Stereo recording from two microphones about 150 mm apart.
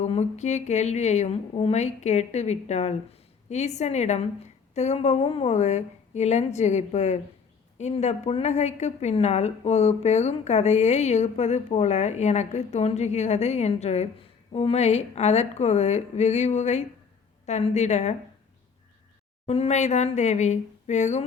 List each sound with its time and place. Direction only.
0.0 s a woman's voice: 50° left (ahead or behind)
19.5 s a woman's voice: 45° left (ahead or behind)